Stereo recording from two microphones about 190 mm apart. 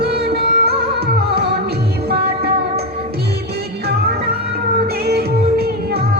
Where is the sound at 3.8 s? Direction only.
55° right (ahead or behind).